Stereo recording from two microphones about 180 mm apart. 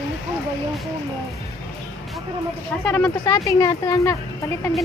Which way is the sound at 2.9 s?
15° left (ahead or behind).